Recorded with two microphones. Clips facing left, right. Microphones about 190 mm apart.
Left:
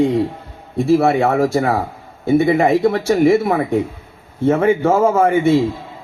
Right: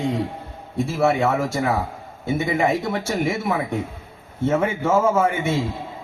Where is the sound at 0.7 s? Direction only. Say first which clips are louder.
Left 6 dB; 60° left (ahead or behind).